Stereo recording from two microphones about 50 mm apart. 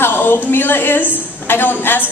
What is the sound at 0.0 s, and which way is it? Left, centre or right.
A woman's voice, left.